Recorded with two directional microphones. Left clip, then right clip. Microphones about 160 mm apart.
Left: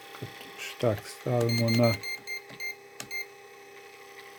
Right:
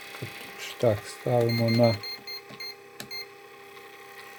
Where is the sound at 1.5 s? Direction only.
25° right (ahead or behind).